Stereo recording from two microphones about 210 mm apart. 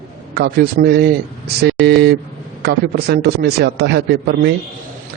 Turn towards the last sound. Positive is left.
turn(degrees=-50)  # may be behind; listen again after turning